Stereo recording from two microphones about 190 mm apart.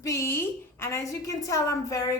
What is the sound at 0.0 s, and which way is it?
A woman's voice, 15° left (ahead or behind).